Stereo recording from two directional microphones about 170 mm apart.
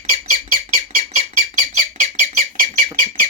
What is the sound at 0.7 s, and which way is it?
Rodents, 45° right (ahead or behind).